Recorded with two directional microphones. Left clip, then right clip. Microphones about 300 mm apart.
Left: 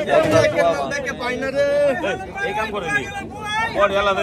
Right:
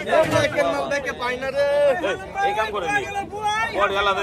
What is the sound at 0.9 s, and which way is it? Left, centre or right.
Speech, right.